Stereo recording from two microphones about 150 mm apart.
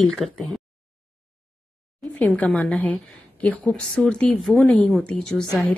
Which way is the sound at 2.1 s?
10° left (ahead or behind).